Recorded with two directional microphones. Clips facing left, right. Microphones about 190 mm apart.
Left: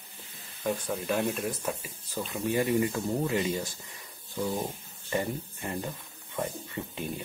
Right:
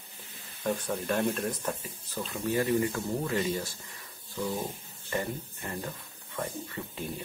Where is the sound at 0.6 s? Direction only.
Centre (ahead or behind); by 3.7 s 15° left (ahead or behind).